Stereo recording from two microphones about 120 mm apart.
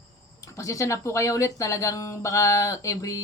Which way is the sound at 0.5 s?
25° left (ahead or behind).